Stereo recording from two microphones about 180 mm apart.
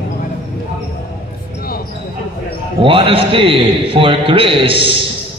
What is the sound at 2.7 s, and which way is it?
A man's voice, 30° right (ahead or behind).